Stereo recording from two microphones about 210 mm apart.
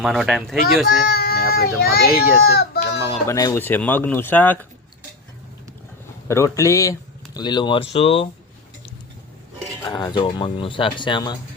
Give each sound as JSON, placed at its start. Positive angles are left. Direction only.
{"t": 0.0, "sound": "speech", "side_deg": 0}
{"t": 0.9, "sound": "speech", "side_deg": 45}
{"t": 3.2, "sound": "speech", "side_deg": 15}
{"t": 6.2, "sound": "speech", "side_deg": 15}
{"t": 9.8, "sound": "speech", "side_deg": 20}